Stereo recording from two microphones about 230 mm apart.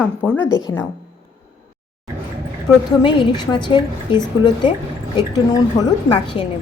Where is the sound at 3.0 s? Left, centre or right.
Centre.